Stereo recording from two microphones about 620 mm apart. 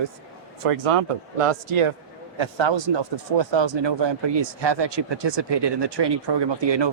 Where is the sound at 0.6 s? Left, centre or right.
Right.